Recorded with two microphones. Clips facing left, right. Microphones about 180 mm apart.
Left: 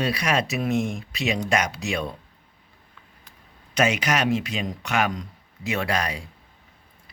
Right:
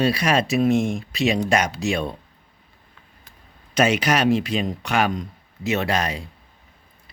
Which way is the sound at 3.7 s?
35° right (ahead or behind).